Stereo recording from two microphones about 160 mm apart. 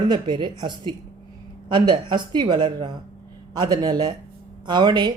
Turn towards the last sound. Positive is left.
turn(degrees=-25)  # may be behind; listen again after turning